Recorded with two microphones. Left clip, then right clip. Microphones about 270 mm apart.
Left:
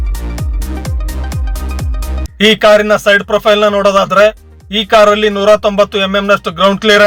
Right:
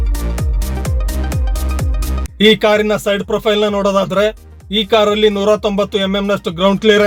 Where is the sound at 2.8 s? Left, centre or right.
Centre.